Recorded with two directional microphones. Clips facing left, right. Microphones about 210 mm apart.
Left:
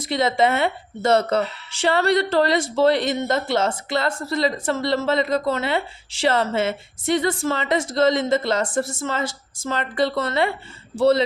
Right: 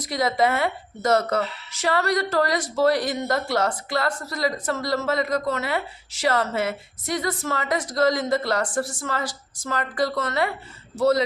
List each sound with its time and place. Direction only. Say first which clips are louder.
0.0 s a woman's voice: left 2 dB; 25° left (ahead or behind)